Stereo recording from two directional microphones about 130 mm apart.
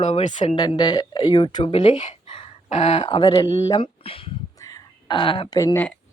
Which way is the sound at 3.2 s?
30° left (ahead or behind).